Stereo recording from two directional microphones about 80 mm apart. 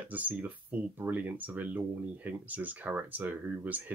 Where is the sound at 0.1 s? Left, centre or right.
Right.